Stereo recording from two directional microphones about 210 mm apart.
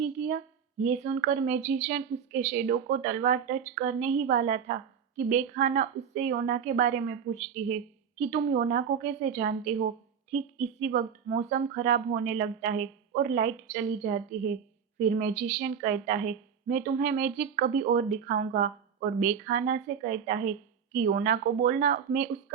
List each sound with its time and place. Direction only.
0.0 s a woman's voice: 35° right (ahead or behind)